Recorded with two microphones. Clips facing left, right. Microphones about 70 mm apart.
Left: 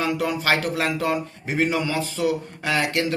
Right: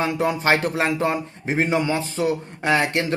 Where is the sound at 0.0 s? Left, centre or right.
Right.